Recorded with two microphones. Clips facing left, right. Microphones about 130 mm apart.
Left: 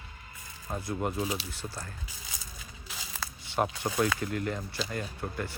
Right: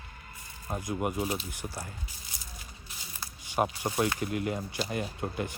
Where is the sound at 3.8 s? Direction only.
10° right (ahead or behind).